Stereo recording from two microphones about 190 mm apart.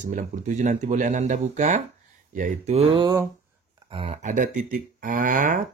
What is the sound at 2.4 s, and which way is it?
Mantra, 35° right (ahead or behind).